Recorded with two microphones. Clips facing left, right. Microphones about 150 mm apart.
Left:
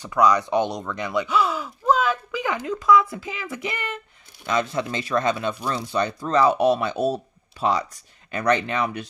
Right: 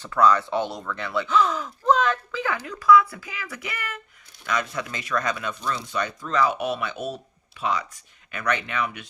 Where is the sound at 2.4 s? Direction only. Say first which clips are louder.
Left 3 dB; 20° left (ahead or behind).